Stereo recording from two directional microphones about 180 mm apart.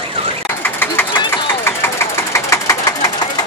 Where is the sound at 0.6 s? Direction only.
10° left (ahead or behind).